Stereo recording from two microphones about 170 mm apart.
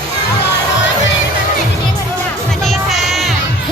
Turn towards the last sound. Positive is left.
turn(degrees=0)  # may be behind; listen again after turning